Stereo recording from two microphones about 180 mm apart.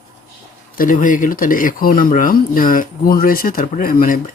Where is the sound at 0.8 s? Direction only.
45° left (ahead or behind).